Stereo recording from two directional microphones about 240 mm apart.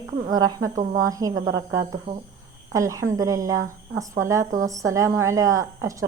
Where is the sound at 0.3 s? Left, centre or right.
Centre.